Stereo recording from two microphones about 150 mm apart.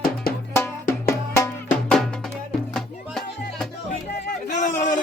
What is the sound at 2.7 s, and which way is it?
Music, centre (ahead or behind).